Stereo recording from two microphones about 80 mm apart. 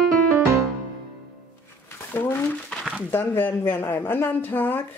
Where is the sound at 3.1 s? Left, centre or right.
Left.